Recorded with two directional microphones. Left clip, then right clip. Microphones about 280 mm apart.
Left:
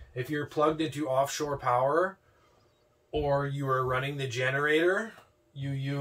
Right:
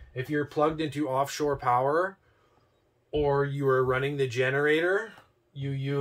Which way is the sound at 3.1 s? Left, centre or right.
Centre.